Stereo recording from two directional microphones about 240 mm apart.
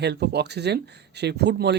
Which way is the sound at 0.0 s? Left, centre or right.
Right.